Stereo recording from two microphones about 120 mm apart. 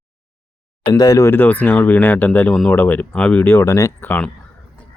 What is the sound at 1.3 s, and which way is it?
Speech, 15° left (ahead or behind).